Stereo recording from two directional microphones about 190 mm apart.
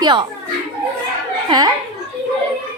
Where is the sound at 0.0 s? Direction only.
25° right (ahead or behind).